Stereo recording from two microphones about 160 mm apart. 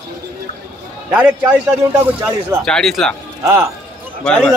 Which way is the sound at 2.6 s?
Centre (ahead or behind).